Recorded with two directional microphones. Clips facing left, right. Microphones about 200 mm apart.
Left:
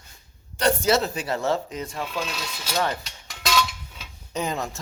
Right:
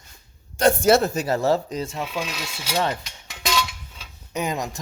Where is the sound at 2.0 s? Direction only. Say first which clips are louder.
Right 1 dB; 10° right (ahead or behind).